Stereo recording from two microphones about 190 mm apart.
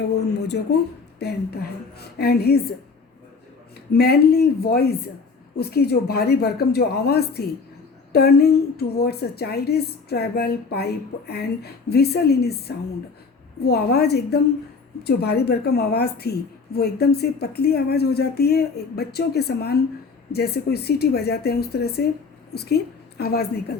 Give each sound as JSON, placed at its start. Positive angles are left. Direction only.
{"t": 0.2, "sound": "a woman's voice", "side_deg": 60}
{"t": 3.9, "sound": "a woman's voice", "side_deg": 55}